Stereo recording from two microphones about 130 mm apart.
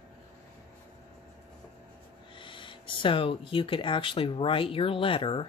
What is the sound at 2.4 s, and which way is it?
Speech, 40° left (ahead or behind).